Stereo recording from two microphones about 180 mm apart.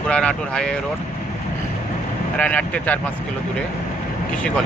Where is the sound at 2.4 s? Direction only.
10° left (ahead or behind).